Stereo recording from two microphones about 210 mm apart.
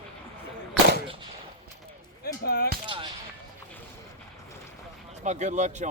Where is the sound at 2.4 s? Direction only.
50° left (ahead or behind).